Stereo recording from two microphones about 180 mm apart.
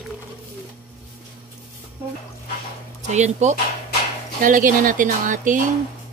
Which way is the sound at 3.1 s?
40° right (ahead or behind).